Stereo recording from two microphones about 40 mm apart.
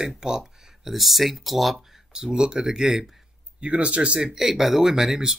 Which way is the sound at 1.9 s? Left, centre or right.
Centre.